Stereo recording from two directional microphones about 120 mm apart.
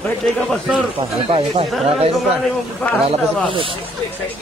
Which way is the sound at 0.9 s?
50° right (ahead or behind).